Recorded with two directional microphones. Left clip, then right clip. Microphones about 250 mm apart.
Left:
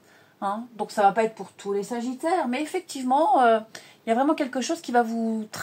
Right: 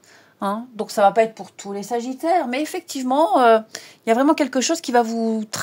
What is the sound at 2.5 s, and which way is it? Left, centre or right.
A woman's voice, right.